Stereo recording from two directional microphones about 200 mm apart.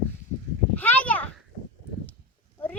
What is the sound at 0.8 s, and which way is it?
Children playing, 10° left (ahead or behind).